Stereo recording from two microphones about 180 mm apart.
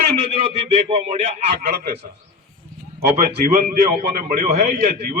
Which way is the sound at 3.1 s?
40° right (ahead or behind).